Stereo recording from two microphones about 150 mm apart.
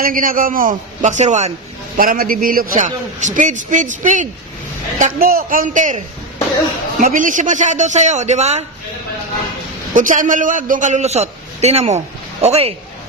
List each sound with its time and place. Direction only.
0.0 s a man's voice: 70° right (ahead or behind); by 1.5 s 50° right (ahead or behind)
2.0 s a man's voice: 70° right (ahead or behind)
7.0 s a man's voice: 60° right (ahead or behind)
9.9 s a man's voice: 60° right (ahead or behind); by 12.7 s 45° right (ahead or behind)